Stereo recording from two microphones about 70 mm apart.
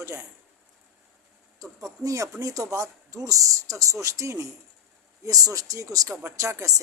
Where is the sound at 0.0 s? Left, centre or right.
Right.